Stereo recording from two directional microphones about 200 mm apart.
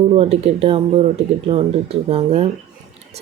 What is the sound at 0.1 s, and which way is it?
Speech, 30° right (ahead or behind).